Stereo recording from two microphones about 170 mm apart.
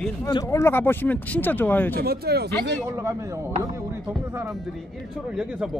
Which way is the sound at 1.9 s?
65° right (ahead or behind).